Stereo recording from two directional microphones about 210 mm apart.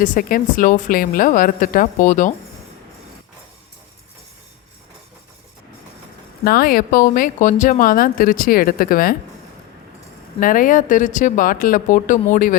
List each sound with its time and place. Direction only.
0.0 s speech: 40° left (ahead or behind)
6.4 s speech: 45° left (ahead or behind)
10.4 s speech: 40° left (ahead or behind)